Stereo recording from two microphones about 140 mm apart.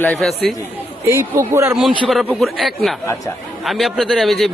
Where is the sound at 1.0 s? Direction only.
20° right (ahead or behind).